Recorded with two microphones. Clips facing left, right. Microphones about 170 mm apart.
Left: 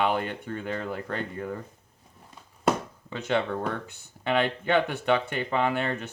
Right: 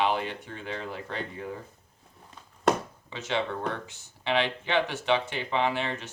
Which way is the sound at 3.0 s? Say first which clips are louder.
Left 3 dB; 55° left (ahead or behind).